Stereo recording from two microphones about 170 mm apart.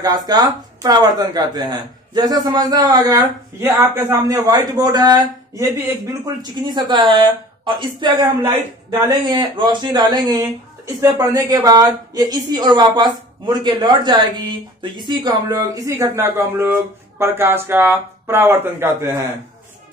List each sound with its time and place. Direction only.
0.0 s a woman's voice: 25° right (ahead or behind)